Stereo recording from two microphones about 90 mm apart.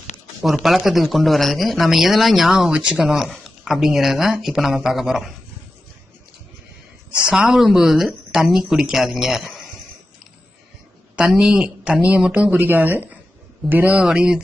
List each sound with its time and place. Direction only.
0.6 s speech: centre (ahead or behind)
7.3 s speech: 10° right (ahead or behind)
11.2 s speech: 5° right (ahead or behind)
14.0 s speech: 10° right (ahead or behind)